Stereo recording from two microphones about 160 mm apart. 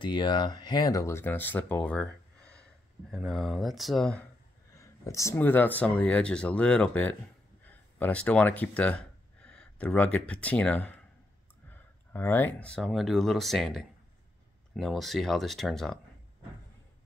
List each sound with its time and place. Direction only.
0.0 s speech: 30° left (ahead or behind); by 4.3 s 5° left (ahead or behind)
4.7 s speech: 20° left (ahead or behind); by 16.0 s 5° left (ahead or behind)